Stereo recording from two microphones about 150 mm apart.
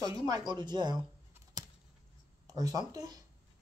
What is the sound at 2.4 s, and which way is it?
Speech, 25° right (ahead or behind).